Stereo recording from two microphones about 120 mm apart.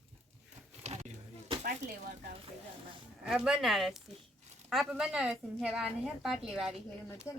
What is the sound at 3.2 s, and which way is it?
A woman's voice, 5° right (ahead or behind).